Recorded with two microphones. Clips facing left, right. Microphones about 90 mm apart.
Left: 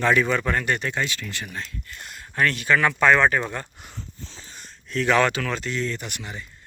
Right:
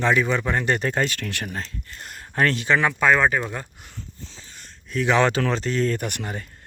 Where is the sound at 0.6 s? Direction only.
35° right (ahead or behind).